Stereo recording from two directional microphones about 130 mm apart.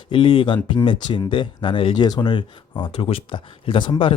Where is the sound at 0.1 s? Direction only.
40° left (ahead or behind).